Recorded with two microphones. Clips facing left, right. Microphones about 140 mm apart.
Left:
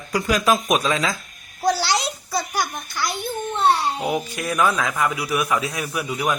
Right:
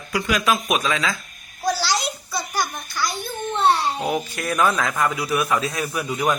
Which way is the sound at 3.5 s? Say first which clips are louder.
Right 1 dB; 5° left (ahead or behind).